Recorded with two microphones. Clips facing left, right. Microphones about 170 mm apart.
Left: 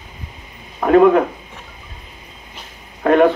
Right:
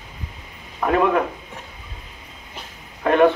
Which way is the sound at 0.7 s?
45° left (ahead or behind).